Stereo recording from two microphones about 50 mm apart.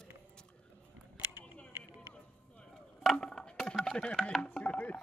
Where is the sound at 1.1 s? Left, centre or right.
Right.